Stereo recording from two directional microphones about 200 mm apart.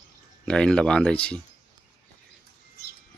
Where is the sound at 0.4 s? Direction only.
5° left (ahead or behind).